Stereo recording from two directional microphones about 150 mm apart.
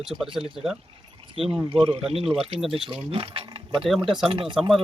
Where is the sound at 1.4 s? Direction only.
35° right (ahead or behind).